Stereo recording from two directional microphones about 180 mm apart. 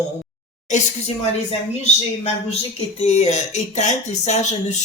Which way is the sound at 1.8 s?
35° left (ahead or behind).